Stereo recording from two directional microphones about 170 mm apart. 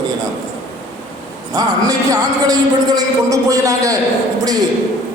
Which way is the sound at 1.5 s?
20° right (ahead or behind).